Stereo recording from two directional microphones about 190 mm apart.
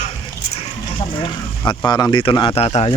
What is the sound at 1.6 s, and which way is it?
Speech, 20° left (ahead or behind).